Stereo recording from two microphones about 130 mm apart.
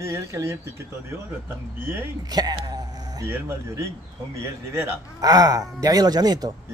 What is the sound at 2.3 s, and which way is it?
Speech, 30° right (ahead or behind).